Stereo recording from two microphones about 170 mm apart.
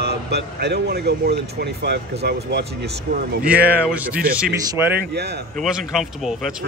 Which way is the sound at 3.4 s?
10° right (ahead or behind).